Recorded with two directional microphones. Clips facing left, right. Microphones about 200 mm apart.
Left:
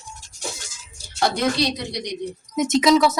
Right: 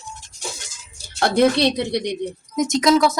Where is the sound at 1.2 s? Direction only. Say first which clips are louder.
Right 5 dB; 60° right (ahead or behind).